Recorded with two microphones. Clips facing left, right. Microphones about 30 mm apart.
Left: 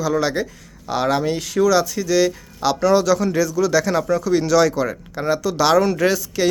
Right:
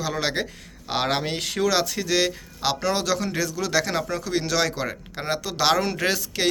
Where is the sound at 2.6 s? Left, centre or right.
Centre.